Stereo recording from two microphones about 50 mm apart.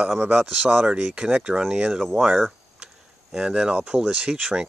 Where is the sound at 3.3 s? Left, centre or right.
Centre.